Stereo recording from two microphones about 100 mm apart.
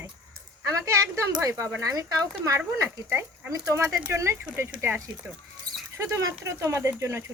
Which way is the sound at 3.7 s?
35° right (ahead or behind).